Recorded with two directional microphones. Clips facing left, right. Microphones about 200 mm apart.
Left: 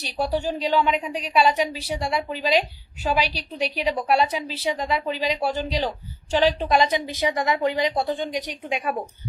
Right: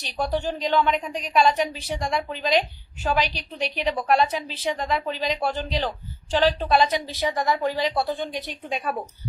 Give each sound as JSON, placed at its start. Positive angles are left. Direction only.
{"t": 0.0, "sound": "a woman's voice", "side_deg": 10}